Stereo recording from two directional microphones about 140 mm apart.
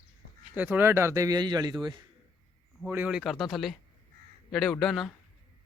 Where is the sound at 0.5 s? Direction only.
15° right (ahead or behind); by 1.7 s 30° right (ahead or behind).